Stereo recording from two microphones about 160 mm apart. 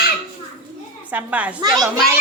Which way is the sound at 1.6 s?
25° right (ahead or behind).